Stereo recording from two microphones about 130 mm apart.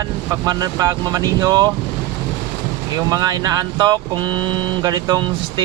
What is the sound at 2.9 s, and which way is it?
Speech, 30° right (ahead or behind).